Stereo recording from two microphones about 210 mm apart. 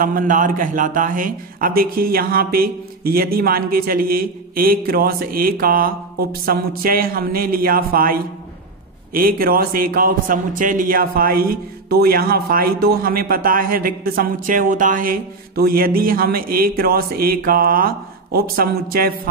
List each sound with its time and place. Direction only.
0.0 s a man's voice: 40° right (ahead or behind)